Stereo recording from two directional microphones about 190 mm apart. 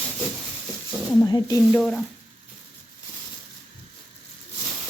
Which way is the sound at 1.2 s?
20° left (ahead or behind).